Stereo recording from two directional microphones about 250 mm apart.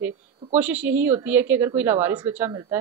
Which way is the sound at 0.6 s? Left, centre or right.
Centre.